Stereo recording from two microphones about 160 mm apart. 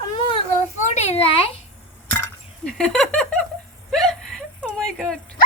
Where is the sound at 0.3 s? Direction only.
45° left (ahead or behind).